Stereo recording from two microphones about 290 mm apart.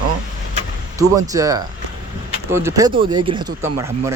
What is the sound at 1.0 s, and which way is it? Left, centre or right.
Speech, centre.